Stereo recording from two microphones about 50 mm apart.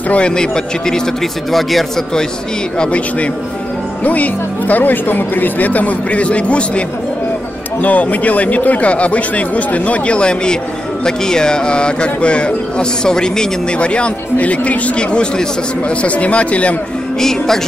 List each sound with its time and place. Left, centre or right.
0.1 s a man's voice: centre
2.8 s speech: left
7.8 s speech: left
17.2 s a man's voice: centre